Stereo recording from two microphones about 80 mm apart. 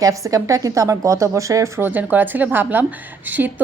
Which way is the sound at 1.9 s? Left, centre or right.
Right.